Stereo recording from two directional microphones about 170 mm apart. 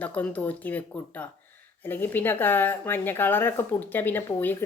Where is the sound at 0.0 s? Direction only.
10° left (ahead or behind).